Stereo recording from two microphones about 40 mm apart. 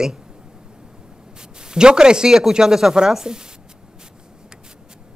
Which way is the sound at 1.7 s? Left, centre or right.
Centre.